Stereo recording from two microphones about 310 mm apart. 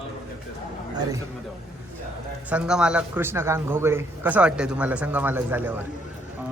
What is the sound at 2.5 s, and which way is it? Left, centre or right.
A man's voice, centre.